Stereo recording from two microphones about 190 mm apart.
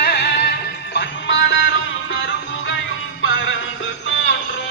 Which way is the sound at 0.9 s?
75° left (ahead or behind).